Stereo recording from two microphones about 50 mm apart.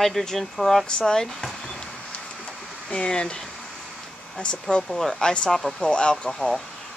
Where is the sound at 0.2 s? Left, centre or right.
Centre.